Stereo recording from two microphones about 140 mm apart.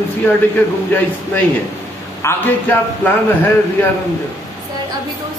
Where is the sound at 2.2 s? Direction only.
20° left (ahead or behind).